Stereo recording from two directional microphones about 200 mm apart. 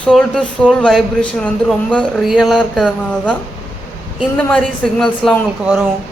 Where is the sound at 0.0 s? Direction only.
5° left (ahead or behind).